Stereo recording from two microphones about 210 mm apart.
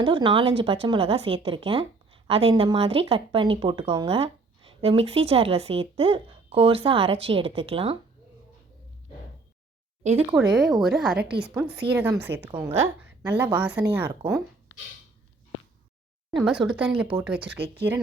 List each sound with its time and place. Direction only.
0.0 s speech: 25° right (ahead or behind)
10.0 s speech: 35° right (ahead or behind)
10.3 s a woman's voice: centre (ahead or behind)
16.3 s speech: 5° right (ahead or behind)